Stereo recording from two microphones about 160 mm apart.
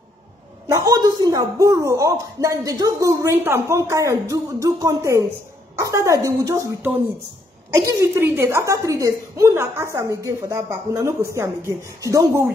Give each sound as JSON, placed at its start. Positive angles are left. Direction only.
{"t": 0.7, "sound": "a woman's voice", "side_deg": -25}